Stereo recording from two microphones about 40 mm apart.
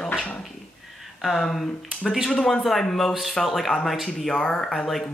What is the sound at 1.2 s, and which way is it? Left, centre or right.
Speech, centre.